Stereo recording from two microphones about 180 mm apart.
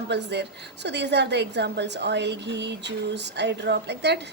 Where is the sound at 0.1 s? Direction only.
70° right (ahead or behind).